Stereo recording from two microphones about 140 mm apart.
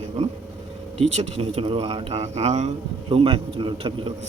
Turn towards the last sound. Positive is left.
turn(degrees=-40)  # may be behind; listen again after turning